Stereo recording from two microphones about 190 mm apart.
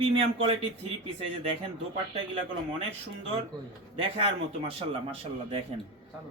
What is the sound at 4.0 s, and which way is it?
Speech, 30° right (ahead or behind).